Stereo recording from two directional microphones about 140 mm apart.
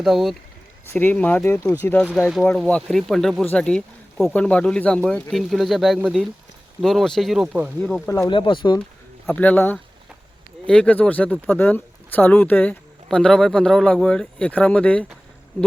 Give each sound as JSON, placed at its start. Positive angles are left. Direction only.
{"t": 0.0, "sound": "speech", "side_deg": 0}
{"t": 0.9, "sound": "speech", "side_deg": 10}
{"t": 8.3, "sound": "speech", "side_deg": 35}
{"t": 9.2, "sound": "speech", "side_deg": 10}